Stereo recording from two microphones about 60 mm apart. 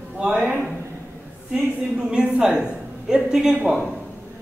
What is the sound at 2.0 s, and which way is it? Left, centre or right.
A woman's voice, centre.